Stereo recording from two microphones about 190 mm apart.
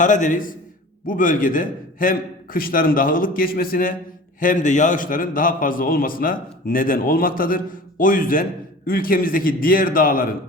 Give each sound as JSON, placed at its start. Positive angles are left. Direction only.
{"t": 0.0, "sound": "a man's voice", "side_deg": 40}